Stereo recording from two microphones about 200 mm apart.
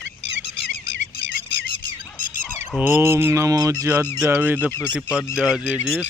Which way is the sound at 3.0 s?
10° right (ahead or behind).